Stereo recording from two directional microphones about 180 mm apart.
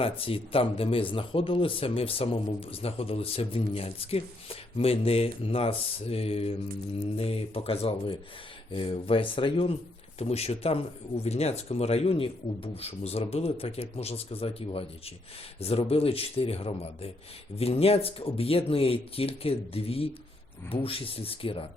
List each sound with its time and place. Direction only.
0.0 s speech: 30° left (ahead or behind)